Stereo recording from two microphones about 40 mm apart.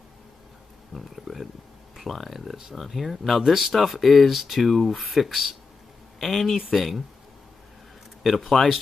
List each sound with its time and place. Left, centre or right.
0.9 s speech: centre
8.2 s speech: centre